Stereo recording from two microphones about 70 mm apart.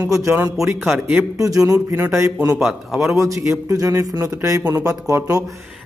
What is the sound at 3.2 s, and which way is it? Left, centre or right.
Speech, right.